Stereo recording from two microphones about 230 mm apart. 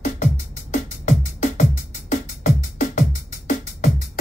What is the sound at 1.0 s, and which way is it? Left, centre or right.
Music, left.